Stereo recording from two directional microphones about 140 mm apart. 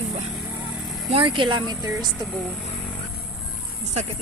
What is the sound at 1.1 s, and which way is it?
Speech, 35° right (ahead or behind).